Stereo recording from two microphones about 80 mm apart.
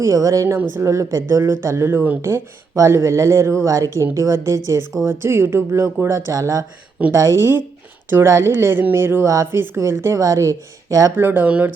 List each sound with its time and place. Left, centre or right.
0.0 s speech: right
0.4 s speech: right
0.9 s speech: right
11.1 s speech: right